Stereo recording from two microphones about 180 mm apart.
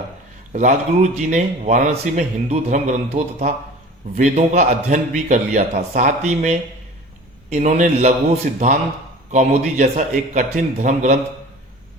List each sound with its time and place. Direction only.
0.5 s a man's voice: 40° right (ahead or behind)